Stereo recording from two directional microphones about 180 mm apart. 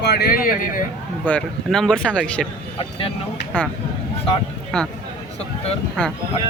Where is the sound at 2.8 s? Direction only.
30° left (ahead or behind).